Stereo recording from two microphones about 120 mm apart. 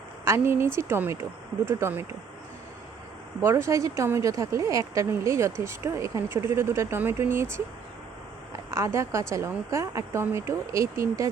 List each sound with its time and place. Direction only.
0.3 s a woman's voice: 20° right (ahead or behind)
3.4 s a woman's voice: 25° right (ahead or behind)
8.7 s a woman's voice: 25° right (ahead or behind)